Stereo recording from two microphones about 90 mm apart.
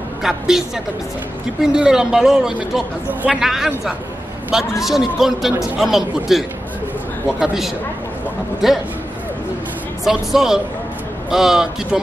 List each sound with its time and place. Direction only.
0.2 s a man's voice: 5° right (ahead or behind)
3.1 s a man's voice: 20° right (ahead or behind)
3.3 s a man's voice: 5° right (ahead or behind)
10.0 s a man's voice: 5° right (ahead or behind)